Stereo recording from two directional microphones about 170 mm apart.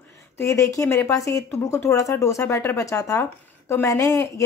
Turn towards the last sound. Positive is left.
turn(degrees=20)  # may be behind; listen again after turning